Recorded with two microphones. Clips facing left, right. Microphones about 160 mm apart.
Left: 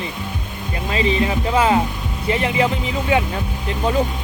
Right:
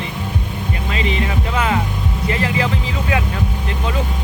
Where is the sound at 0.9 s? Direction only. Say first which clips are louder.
Left 4 dB; 30° left (ahead or behind).